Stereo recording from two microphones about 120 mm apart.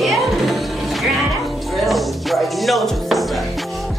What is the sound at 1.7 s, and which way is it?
Music, centre (ahead or behind).